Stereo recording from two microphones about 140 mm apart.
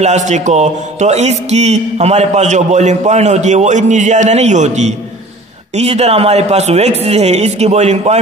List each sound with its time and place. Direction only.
0.0 s a man's voice: 55° right (ahead or behind)